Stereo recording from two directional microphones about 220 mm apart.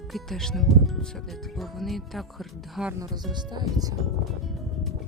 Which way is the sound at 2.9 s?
15° right (ahead or behind).